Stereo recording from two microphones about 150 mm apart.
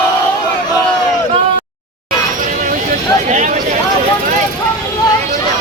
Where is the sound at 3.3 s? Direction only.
55° right (ahead or behind).